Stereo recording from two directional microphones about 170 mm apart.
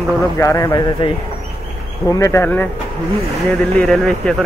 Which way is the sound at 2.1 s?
20° left (ahead or behind).